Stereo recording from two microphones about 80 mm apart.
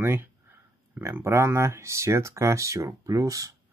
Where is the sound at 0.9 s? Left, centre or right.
Right.